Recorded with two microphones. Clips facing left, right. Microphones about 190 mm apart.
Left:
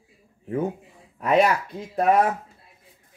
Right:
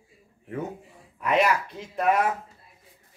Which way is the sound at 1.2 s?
40° left (ahead or behind).